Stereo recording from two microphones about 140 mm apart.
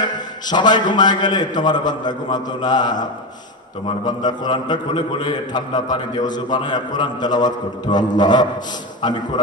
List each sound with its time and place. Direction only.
0.5 s a man's voice: 30° left (ahead or behind)